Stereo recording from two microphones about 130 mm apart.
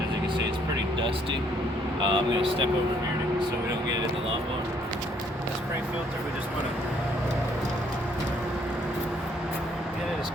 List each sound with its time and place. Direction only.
2.0 s speech: 40° right (ahead or behind)